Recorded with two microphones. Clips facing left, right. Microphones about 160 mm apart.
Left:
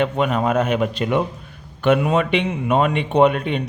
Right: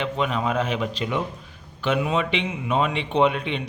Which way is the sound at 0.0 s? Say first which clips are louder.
Left 5 dB; 50° left (ahead or behind).